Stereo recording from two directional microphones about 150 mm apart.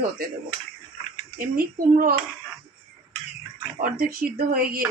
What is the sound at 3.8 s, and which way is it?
Speech, 80° right.